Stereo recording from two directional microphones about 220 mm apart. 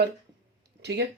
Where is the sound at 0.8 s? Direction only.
50° right (ahead or behind).